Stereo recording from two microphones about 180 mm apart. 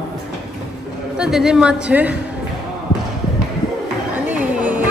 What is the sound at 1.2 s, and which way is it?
Speech, 5° right (ahead or behind).